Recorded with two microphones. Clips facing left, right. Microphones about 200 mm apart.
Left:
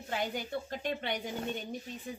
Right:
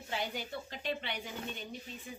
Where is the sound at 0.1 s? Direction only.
50° left (ahead or behind).